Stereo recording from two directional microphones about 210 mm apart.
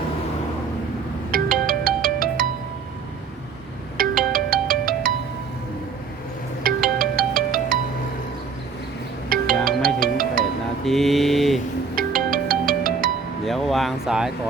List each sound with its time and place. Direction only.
1.3 s ringtone: 45° right (ahead or behind)
3.9 s ringtone: 40° right (ahead or behind)
6.6 s music: 40° right (ahead or behind)
9.3 s ringtone: 40° right (ahead or behind)
10.0 s music: 40° right (ahead or behind)
10.8 s a sound: centre (ahead or behind)
11.9 s music: 40° right (ahead or behind)
13.4 s a sound: centre (ahead or behind)